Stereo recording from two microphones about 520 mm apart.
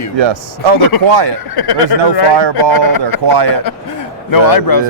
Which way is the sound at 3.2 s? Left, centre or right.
Right.